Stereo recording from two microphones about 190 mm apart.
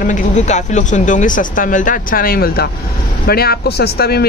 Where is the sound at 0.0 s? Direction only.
40° left (ahead or behind).